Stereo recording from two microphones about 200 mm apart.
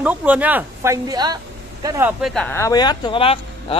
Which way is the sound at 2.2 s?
5° left (ahead or behind).